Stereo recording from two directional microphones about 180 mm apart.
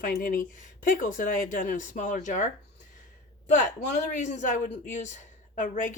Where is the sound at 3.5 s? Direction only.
40° left (ahead or behind).